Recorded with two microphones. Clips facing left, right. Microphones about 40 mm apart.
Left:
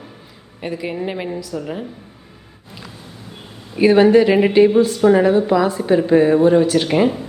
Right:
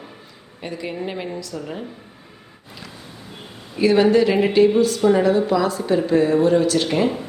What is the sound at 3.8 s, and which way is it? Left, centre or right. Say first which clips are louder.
A woman's voice: left 4 dB; left.